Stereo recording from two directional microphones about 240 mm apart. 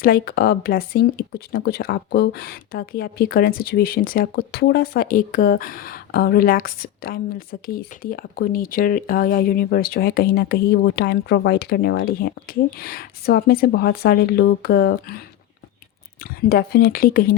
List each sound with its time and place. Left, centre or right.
0.0 s speech: left
16.2 s speech: left